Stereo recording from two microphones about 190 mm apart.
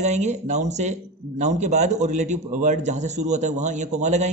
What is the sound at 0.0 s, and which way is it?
A man's voice, 35° right (ahead or behind).